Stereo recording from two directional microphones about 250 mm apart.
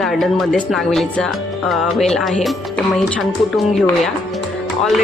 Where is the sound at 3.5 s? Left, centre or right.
Centre.